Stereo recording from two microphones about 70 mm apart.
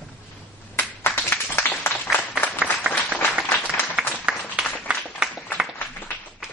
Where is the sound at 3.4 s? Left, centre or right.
Left.